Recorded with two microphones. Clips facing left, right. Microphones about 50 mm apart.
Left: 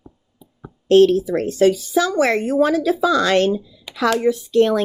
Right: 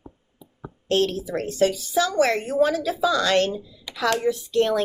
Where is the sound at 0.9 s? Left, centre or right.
Left.